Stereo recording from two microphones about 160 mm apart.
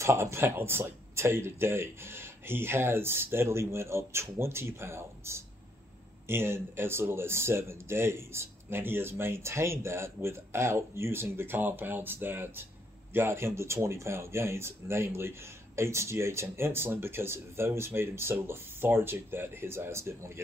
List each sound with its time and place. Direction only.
0.0 s speech: 15° right (ahead or behind)